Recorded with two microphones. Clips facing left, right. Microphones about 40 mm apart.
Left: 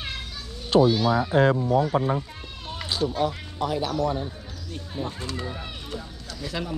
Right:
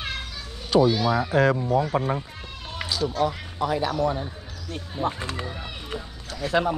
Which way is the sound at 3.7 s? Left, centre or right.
Centre.